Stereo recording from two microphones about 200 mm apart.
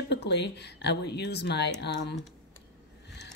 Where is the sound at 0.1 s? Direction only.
55° left (ahead or behind).